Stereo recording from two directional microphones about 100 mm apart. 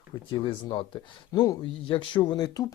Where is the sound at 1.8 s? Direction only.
60° left (ahead or behind); by 2.7 s 35° left (ahead or behind).